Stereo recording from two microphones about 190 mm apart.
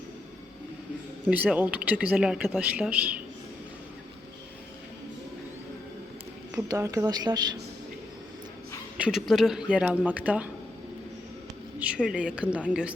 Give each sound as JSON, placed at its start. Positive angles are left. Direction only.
{"t": 1.2, "sound": "speech", "side_deg": -10}
{"t": 6.5, "sound": "speech", "side_deg": -15}
{"t": 9.0, "sound": "speech", "side_deg": -5}
{"t": 11.8, "sound": "speech", "side_deg": -5}